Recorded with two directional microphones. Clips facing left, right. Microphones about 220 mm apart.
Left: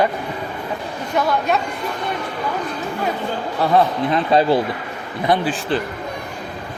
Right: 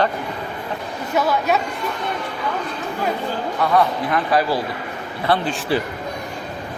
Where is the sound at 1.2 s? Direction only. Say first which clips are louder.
Even; 5° right (ahead or behind).